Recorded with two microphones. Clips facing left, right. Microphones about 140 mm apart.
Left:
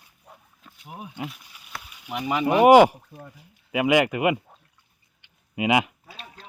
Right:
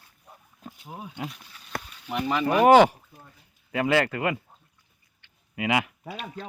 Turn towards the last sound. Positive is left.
turn(degrees=20)  # may be behind; listen again after turning